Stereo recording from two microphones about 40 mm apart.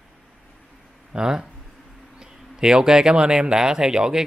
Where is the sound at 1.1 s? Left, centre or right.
Centre.